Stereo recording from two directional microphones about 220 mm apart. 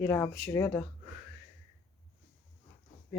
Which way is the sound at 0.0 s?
10° left (ahead or behind).